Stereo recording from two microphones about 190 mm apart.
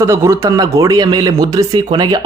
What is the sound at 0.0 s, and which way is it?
Speech, 15° right (ahead or behind).